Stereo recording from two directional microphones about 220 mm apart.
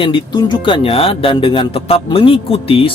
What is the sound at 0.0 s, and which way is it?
Speech, 20° left (ahead or behind).